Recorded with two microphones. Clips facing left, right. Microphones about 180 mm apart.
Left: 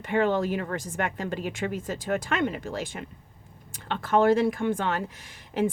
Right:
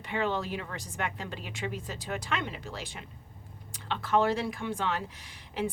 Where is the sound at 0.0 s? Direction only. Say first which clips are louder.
Left 7 dB; 50° left (ahead or behind).